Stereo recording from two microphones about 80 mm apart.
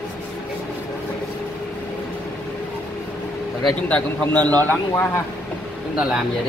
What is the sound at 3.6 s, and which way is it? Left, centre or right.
Speech, centre.